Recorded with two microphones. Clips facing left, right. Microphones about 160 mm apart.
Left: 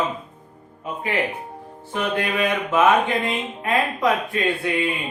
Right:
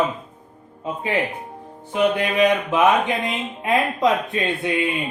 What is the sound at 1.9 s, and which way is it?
Speech, 15° right (ahead or behind).